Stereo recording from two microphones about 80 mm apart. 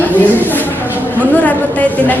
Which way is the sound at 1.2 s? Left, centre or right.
Centre.